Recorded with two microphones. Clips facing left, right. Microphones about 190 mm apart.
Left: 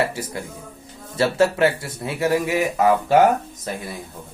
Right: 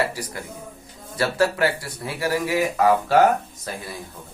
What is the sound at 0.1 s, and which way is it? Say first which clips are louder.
Speech: left 3 dB; 25° left (ahead or behind).